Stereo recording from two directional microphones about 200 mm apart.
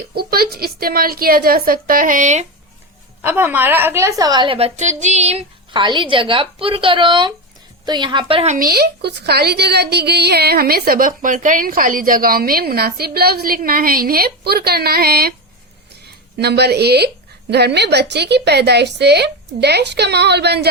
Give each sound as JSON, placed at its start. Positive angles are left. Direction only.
{"t": 0.1, "sound": "a woman's voice", "side_deg": -50}
{"t": 3.2, "sound": "a woman's voice", "side_deg": -10}
{"t": 8.5, "sound": "a woman's voice", "side_deg": -50}